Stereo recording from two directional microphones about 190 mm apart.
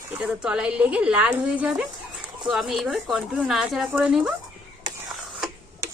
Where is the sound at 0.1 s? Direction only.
5° right (ahead or behind).